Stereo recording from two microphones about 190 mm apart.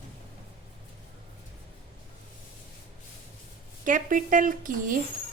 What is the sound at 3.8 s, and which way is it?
A woman's voice, 45° right (ahead or behind).